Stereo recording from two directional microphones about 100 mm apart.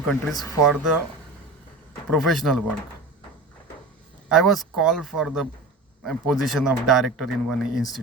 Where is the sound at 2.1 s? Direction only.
Centre (ahead or behind).